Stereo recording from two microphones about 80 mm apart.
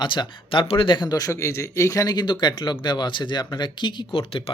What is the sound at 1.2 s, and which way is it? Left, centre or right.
Speech, left.